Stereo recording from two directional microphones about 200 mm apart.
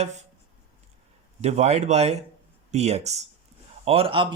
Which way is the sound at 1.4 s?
35° right (ahead or behind).